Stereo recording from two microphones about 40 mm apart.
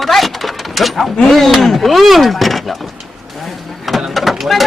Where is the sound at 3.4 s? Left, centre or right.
Centre.